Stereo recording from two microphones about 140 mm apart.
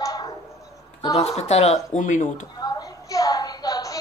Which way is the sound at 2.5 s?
30° left (ahead or behind).